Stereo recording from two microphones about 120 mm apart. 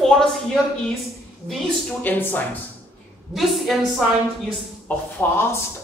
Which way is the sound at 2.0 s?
15° left (ahead or behind).